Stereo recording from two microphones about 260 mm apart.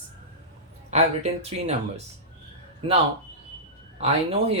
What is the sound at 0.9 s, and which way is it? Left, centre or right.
Speech, right.